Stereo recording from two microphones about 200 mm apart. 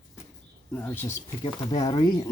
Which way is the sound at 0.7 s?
10° left (ahead or behind).